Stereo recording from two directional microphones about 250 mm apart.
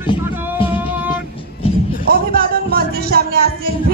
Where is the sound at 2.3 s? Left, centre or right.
Right.